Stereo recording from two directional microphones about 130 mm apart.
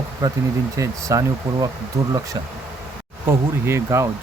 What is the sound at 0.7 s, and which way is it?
Speech, 25° right (ahead or behind).